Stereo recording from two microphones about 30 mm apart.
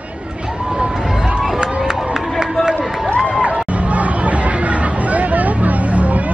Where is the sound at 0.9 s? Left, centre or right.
Centre.